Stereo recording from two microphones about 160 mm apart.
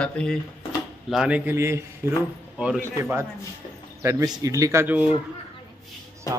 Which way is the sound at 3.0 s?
15° right (ahead or behind).